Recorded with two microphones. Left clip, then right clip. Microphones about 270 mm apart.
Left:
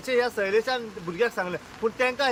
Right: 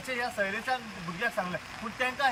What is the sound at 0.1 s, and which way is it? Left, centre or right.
Speech, centre.